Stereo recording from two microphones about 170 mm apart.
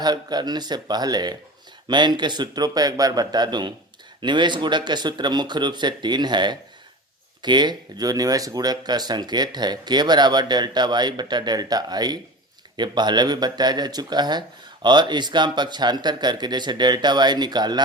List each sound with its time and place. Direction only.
0.0 s speech: 25° right (ahead or behind)